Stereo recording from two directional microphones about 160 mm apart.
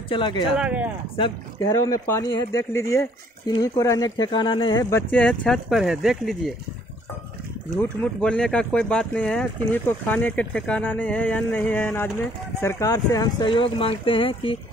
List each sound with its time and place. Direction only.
0.1 s speech: 30° left (ahead or behind)
0.6 s speech: 10° right (ahead or behind)
1.6 s speech: 20° left (ahead or behind)
5.1 s speech: 5° left (ahead or behind)
7.7 s speech: 5° left (ahead or behind); by 13.5 s 20° left (ahead or behind)
13.5 s speech: 35° left (ahead or behind)